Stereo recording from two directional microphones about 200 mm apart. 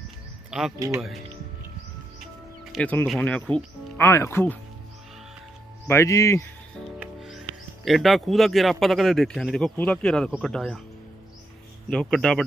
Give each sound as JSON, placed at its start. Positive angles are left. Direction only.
{"t": 0.5, "sound": "speech", "side_deg": 0}
{"t": 0.7, "sound": "speech", "side_deg": -15}
{"t": 2.7, "sound": "speech", "side_deg": 5}
{"t": 5.9, "sound": "speech", "side_deg": 15}
{"t": 7.0, "sound": "speech", "side_deg": 0}
{"t": 11.9, "sound": "speech", "side_deg": 0}